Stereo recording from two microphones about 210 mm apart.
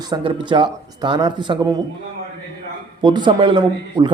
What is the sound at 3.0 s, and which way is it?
Speech, 20° right (ahead or behind).